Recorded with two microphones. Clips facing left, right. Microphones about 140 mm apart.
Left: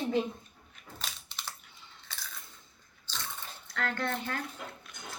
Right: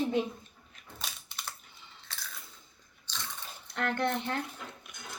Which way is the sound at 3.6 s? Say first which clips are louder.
Right 3 dB; 20° right (ahead or behind).